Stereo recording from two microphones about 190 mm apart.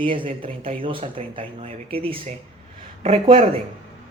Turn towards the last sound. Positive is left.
turn(degrees=-30)  # may be behind; listen again after turning